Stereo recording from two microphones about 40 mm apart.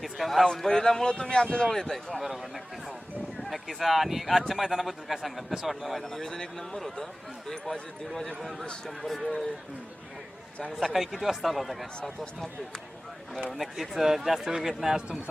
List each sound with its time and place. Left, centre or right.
0.0 s a man's voice: centre
2.2 s a man's voice: centre
6.1 s speech: centre
8.4 s a man's voice: centre
10.7 s a man's voice: centre
13.5 s speech: centre